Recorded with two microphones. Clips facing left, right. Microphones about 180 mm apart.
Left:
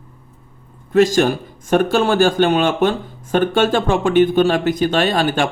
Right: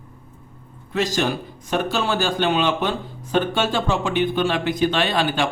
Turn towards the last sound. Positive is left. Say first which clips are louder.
# left 4 dB
turn(degrees=45)  # may be behind; listen again after turning